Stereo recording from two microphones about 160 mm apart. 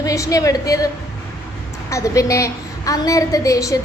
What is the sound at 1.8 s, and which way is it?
A woman's voice, 20° left (ahead or behind).